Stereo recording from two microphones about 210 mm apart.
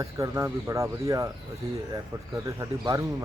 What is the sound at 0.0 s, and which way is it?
Speech, 15° right (ahead or behind).